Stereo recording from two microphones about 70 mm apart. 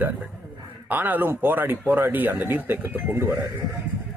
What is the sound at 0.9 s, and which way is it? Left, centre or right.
Speech, right.